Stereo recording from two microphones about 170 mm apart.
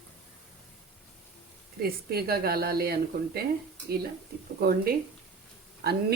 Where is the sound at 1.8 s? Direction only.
65° right (ahead or behind).